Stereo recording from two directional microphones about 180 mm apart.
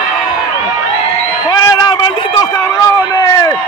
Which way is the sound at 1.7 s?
25° left (ahead or behind).